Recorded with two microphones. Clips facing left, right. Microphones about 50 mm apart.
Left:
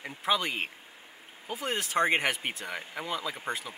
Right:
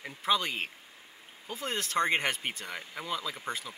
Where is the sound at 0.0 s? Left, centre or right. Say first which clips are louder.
Left 1 dB; centre.